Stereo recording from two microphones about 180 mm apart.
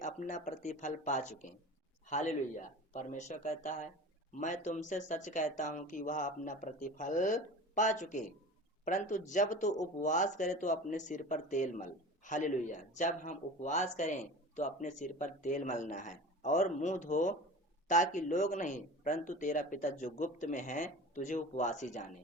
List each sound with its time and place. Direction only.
0.0 s speech: 45° left (ahead or behind)